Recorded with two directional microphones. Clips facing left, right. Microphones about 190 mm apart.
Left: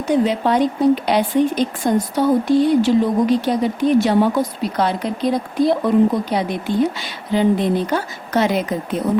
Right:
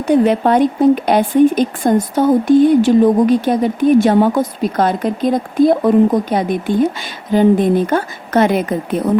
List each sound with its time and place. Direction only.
0.1 s a woman's voice: 55° right (ahead or behind)